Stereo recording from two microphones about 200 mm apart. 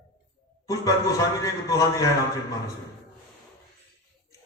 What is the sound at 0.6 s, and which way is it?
A man's voice, 15° left (ahead or behind).